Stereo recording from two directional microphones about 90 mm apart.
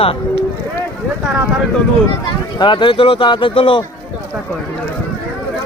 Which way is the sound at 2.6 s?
60° left (ahead or behind).